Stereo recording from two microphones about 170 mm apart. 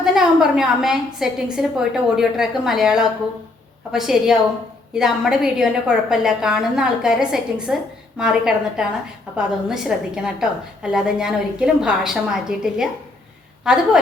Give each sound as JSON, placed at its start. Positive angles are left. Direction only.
{"t": 0.0, "sound": "a woman's voice", "side_deg": -5}